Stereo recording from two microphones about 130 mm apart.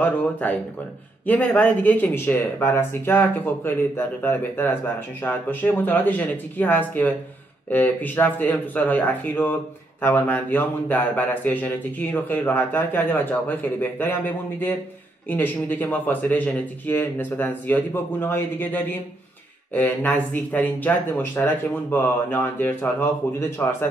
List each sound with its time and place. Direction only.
0.0 s speech: 15° left (ahead or behind)